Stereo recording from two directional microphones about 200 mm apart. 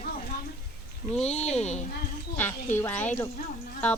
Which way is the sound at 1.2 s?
30° left (ahead or behind).